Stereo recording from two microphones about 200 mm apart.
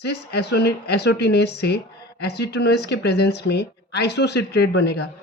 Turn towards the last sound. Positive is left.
turn(degrees=55)  # may be behind; listen again after turning